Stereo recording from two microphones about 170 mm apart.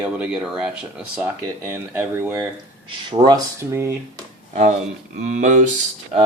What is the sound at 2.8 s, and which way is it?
Speech, 30° right (ahead or behind).